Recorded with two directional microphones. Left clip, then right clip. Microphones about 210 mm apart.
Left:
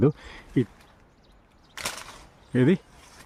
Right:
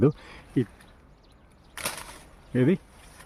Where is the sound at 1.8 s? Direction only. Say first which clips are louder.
Left 1 dB; 5° right (ahead or behind).